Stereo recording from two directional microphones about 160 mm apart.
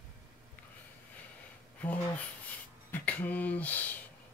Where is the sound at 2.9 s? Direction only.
10° left (ahead or behind).